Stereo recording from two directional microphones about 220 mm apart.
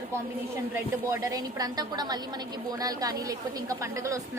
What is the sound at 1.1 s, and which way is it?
A woman's voice, 15° right (ahead or behind).